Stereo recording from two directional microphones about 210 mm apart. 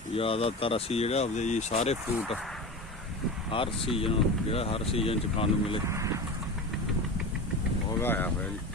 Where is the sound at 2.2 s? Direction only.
Centre (ahead or behind).